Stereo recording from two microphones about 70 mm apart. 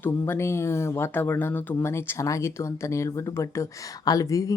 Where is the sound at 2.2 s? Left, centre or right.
Left.